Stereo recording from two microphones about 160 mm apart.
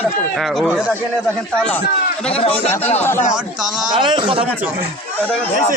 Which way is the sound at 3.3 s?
5° right (ahead or behind).